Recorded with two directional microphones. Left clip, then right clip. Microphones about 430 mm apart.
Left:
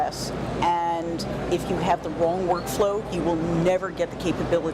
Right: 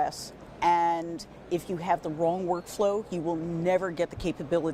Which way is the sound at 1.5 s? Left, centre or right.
Right.